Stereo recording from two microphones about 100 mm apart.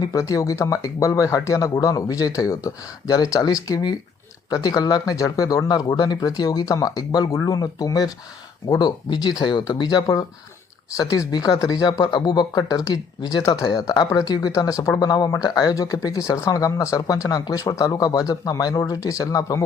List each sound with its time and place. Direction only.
0.0 s speech: 35° left (ahead or behind)